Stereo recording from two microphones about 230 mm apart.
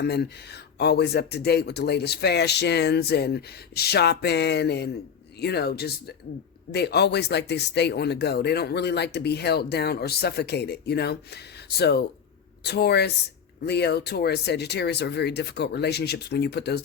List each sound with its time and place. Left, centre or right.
0.0 s speech: left